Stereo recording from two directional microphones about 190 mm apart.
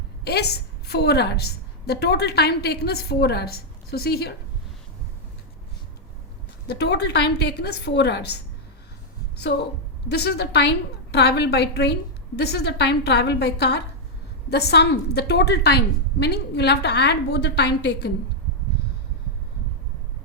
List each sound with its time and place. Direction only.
0.3 s a woman's voice: 60° left (ahead or behind)
6.7 s a woman's voice: 60° left (ahead or behind)
9.5 s a woman's voice: 65° left (ahead or behind)